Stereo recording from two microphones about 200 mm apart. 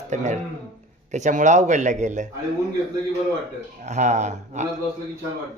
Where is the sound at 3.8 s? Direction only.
35° right (ahead or behind).